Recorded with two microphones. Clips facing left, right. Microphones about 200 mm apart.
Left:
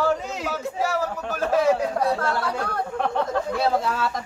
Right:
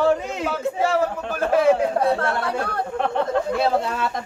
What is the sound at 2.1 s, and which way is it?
Speech, 60° right (ahead or behind).